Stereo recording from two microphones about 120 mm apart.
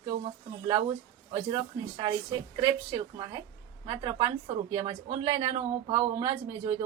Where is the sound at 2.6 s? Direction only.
30° right (ahead or behind).